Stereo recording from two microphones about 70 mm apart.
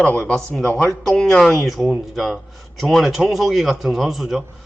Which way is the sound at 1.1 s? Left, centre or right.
Centre.